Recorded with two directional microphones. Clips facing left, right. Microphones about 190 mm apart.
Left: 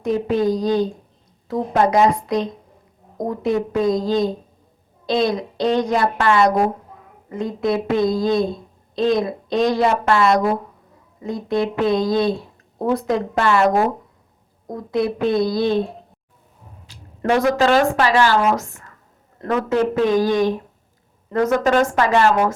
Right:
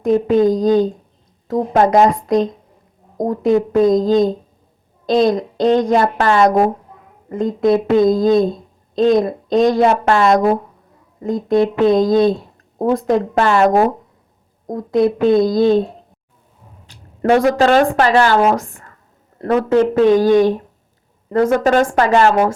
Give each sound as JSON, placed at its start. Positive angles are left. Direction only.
{"t": 0.0, "sound": "a woman's voice", "side_deg": -45}
{"t": 17.2, "sound": "speech", "side_deg": -40}